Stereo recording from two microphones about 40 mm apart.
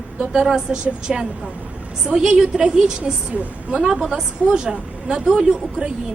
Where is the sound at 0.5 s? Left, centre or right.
Centre.